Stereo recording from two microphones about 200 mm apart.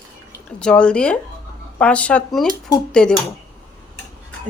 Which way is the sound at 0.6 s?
5° left (ahead or behind).